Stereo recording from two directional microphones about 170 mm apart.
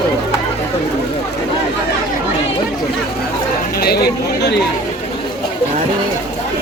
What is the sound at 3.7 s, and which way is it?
Speech, 65° left (ahead or behind).